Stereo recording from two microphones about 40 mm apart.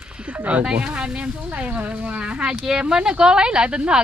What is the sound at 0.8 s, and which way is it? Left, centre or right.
Speech, right.